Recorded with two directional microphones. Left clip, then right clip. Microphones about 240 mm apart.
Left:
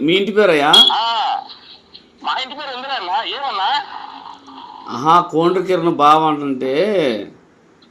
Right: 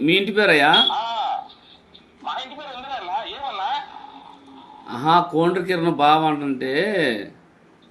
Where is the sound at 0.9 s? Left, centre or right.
Left.